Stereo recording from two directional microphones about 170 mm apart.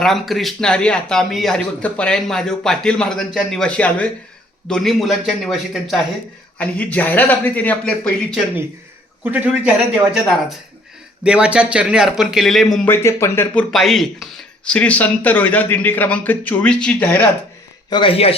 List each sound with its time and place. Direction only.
0.0 s speech: centre (ahead or behind)
9.2 s a man's voice: 10° right (ahead or behind)
11.2 s speech: 5° right (ahead or behind)
12.7 s speech: 10° left (ahead or behind)
17.8 s speech: 30° left (ahead or behind)